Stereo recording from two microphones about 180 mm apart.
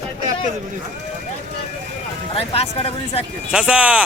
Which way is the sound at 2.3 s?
30° left (ahead or behind).